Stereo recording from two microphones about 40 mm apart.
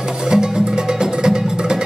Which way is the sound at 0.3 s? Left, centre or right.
Centre.